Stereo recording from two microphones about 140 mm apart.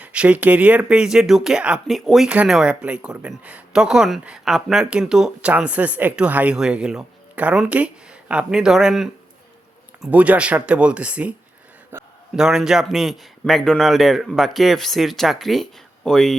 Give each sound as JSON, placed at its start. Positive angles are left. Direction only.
{"t": 0.0, "sound": "speech", "side_deg": -10}
{"t": 11.9, "sound": "a sound", "side_deg": -15}
{"t": 12.4, "sound": "speech", "side_deg": -5}